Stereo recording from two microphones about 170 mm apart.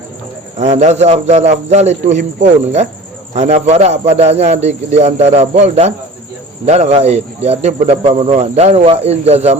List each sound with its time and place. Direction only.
0.5 s speech: 45° right (ahead or behind)